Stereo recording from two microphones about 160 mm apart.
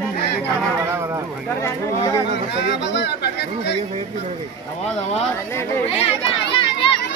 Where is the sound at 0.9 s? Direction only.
15° right (ahead or behind).